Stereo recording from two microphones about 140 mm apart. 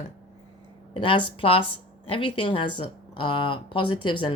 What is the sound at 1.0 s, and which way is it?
Speech, 35° left (ahead or behind).